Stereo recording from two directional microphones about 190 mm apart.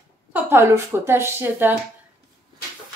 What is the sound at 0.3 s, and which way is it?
A woman's voice, 10° right (ahead or behind).